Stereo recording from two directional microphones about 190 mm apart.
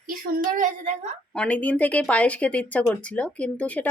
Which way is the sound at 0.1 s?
45° right (ahead or behind).